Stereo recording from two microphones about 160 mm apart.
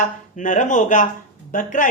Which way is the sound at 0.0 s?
55° left (ahead or behind).